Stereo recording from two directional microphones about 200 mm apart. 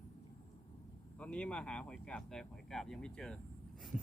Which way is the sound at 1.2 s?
5° left (ahead or behind).